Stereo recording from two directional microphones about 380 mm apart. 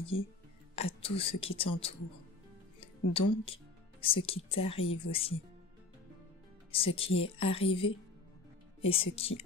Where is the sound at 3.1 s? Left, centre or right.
Centre.